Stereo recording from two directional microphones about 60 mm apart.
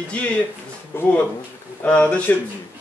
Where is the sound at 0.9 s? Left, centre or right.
Left.